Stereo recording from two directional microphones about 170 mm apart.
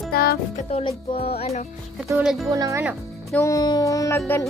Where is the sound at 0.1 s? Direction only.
65° left (ahead or behind).